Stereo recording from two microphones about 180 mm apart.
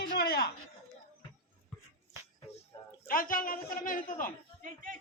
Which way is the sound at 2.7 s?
20° left (ahead or behind).